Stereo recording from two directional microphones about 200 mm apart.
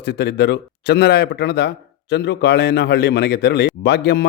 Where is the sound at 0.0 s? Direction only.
55° left (ahead or behind).